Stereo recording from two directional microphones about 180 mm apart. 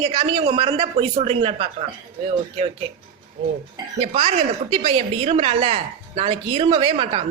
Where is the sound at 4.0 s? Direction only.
35° right (ahead or behind).